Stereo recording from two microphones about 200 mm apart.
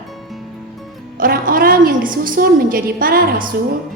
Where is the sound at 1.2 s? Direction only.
45° right (ahead or behind).